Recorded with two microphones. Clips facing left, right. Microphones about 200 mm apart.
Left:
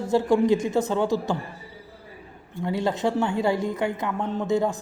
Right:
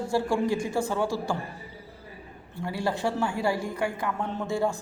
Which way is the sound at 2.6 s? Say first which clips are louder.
Left 4 dB; 20° left (ahead or behind).